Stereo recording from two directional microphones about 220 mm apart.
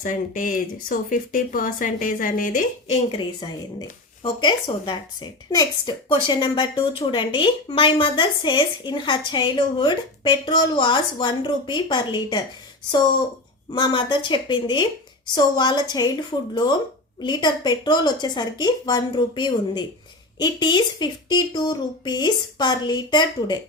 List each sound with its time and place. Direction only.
0.0 s a woman's voice: 35° left (ahead or behind); by 12.4 s 20° left (ahead or behind)
13.7 s a woman's voice: 20° left (ahead or behind)
17.2 s a woman's voice: 20° left (ahead or behind)